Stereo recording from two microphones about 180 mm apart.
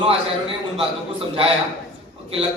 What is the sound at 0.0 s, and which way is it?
Speech, 30° right (ahead or behind).